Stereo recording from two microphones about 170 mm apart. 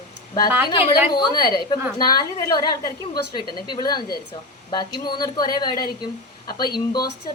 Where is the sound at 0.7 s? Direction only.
30° left (ahead or behind).